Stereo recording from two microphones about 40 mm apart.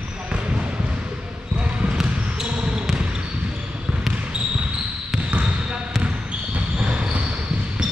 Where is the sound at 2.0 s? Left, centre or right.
Centre.